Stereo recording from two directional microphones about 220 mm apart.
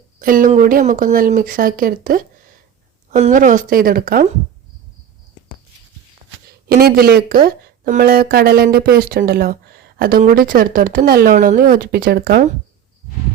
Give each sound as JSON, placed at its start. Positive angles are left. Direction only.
{"t": 0.2, "sound": "speech", "side_deg": -40}
{"t": 6.7, "sound": "speech", "side_deg": -45}